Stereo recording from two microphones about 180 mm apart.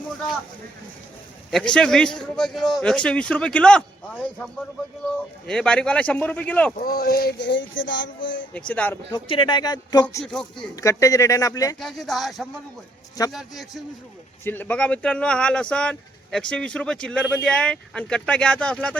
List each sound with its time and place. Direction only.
1.5 s speech: 5° left (ahead or behind)
5.5 s speech: 5° left (ahead or behind)
6.7 s a sound: 55° left (ahead or behind); by 8.4 s 90° left
8.5 s speech: 5° left (ahead or behind)
9.1 s speech: 25° left (ahead or behind)
10.2 s speech: centre (ahead or behind)
10.8 s speech: 20° left (ahead or behind)
11.8 s speech: centre (ahead or behind)
14.4 s speech: 10° left (ahead or behind)